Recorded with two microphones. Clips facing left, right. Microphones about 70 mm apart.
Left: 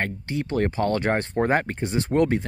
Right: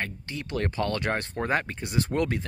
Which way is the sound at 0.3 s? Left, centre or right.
Left.